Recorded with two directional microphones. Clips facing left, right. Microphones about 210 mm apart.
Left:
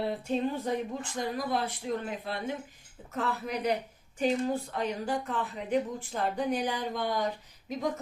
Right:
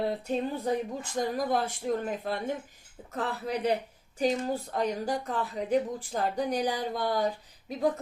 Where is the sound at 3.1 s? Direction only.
35° right (ahead or behind).